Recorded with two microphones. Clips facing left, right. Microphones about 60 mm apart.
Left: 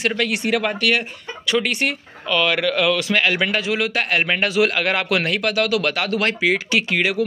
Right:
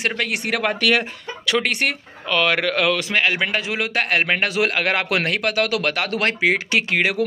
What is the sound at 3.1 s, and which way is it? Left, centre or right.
A man's voice, right.